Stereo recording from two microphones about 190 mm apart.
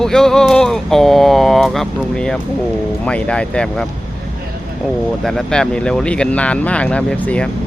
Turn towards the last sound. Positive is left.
turn(degrees=5)  # may be behind; listen again after turning